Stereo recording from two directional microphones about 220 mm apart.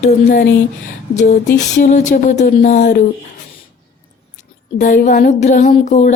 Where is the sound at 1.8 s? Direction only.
35° left (ahead or behind).